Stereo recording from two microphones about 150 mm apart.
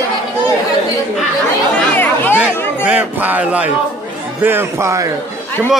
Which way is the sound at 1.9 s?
10° left (ahead or behind).